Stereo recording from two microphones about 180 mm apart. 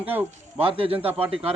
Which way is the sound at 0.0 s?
10° right (ahead or behind).